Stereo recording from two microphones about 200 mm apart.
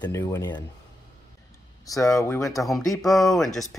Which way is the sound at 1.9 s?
15° left (ahead or behind).